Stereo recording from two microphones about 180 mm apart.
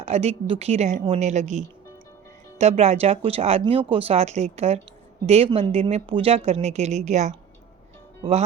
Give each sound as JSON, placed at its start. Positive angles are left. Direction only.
{"t": 0.0, "sound": "a woman's voice", "side_deg": -35}